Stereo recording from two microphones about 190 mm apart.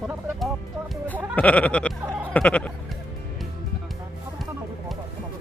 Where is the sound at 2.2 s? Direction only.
5° left (ahead or behind).